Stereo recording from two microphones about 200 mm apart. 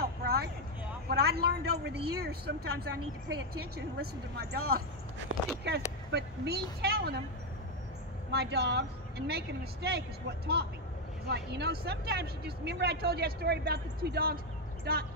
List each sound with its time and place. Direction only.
0.0 s a sound: 50° right (ahead or behind)
1.0 s speech: 55° right (ahead or behind)
6.1 s speech: 55° right (ahead or behind)
8.3 s a woman's voice: 55° right (ahead or behind)